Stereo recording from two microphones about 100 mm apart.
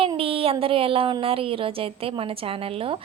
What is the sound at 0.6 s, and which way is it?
A woman's voice, 65° right (ahead or behind).